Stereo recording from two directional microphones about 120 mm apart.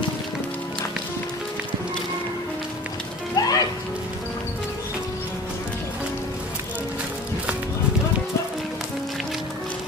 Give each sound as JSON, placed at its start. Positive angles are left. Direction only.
{"t": 3.3, "sound": "music", "side_deg": 30}